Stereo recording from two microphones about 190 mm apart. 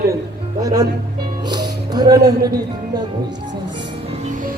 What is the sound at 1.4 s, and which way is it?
Music, 20° right (ahead or behind).